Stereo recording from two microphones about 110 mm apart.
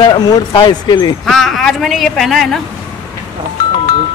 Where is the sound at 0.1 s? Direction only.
40° left (ahead or behind).